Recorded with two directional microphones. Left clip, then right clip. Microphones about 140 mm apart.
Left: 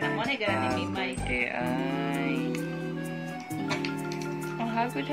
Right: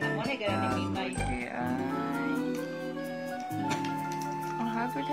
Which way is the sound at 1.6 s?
25° left (ahead or behind).